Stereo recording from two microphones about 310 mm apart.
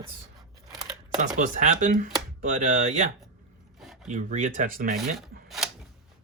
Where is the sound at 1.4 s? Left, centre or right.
Right.